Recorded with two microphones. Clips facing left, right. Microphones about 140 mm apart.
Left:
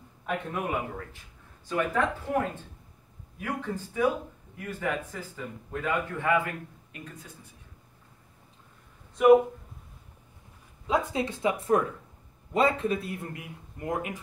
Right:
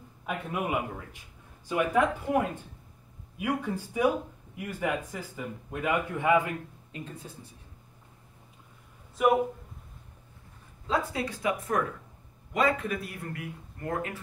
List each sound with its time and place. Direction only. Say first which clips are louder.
0.3 s a man's voice: even; 5° right (ahead or behind); by 7.3 s 25° right (ahead or behind)
9.2 s speech: left 6 dB; centre (ahead or behind)
10.9 s a man's voice: left 2 dB; 20° left (ahead or behind)